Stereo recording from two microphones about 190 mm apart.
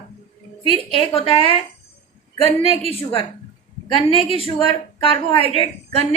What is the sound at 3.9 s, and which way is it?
A woman's voice, 30° left (ahead or behind).